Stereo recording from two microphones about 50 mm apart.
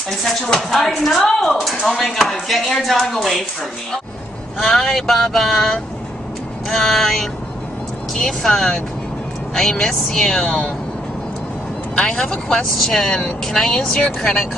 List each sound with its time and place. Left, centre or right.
0.2 s speech: centre
4.6 s speech: centre
12.2 s speech: centre